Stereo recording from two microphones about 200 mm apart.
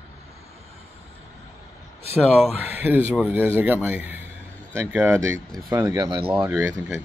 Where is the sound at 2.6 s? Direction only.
10° right (ahead or behind).